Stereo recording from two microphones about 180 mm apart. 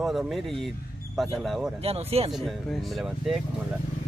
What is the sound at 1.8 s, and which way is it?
Speech, 35° right (ahead or behind).